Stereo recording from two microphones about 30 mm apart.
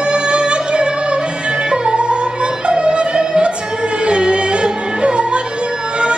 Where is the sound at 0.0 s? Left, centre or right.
Right.